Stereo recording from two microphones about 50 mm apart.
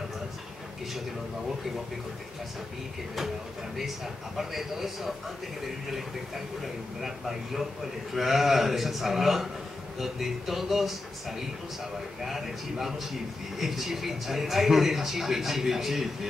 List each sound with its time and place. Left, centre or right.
3.7 s a man's voice: centre